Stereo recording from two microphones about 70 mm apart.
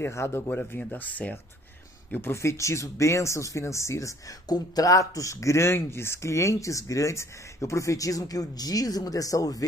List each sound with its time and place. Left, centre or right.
0.0 s speech: left
0.7 s speech: left
2.3 s speech: left
4.5 s speech: left